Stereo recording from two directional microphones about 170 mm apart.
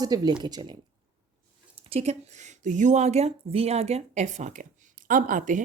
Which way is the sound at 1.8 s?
35° right (ahead or behind).